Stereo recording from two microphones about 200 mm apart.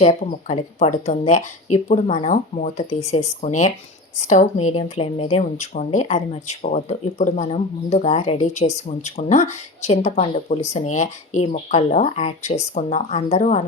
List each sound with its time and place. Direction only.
0.4 s speech: 35° left (ahead or behind)